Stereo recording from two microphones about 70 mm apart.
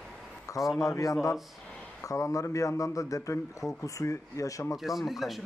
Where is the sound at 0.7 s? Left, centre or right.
Left.